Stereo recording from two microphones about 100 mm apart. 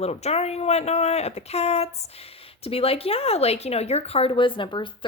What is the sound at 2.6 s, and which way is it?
Speech, 70° left (ahead or behind).